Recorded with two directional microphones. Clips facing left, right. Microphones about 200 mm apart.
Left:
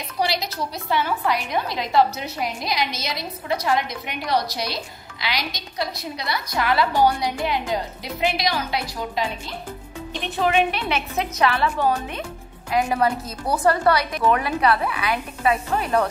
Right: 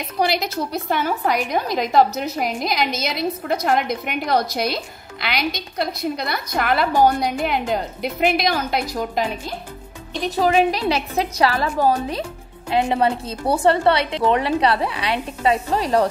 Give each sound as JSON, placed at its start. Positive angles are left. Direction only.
{"t": 0.2, "sound": "a woman's voice", "side_deg": -50}
{"t": 10.2, "sound": "a woman's voice", "side_deg": -35}
{"t": 12.7, "sound": "a woman's voice", "side_deg": -25}